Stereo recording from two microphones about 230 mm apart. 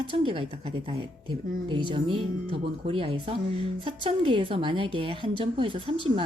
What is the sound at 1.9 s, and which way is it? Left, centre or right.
A woman's voice, right.